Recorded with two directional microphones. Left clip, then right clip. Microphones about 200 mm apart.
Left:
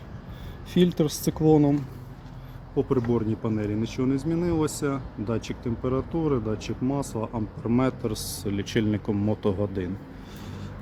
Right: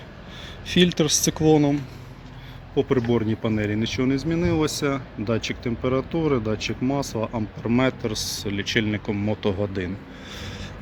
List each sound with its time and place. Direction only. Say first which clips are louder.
0.7 s speech: right 4 dB; 5° left (ahead or behind)
2.7 s speech: right 3 dB; 10° right (ahead or behind)
8.1 s speech: right 4 dB; 15° left (ahead or behind)